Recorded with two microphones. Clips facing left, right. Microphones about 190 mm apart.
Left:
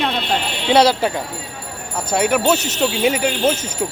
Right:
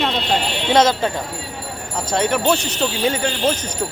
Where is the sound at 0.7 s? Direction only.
10° left (ahead or behind).